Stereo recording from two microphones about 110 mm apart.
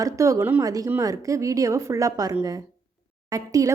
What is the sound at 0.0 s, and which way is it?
A woman's voice, 30° right (ahead or behind).